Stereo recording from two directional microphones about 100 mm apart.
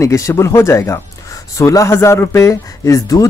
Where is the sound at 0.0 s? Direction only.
30° left (ahead or behind).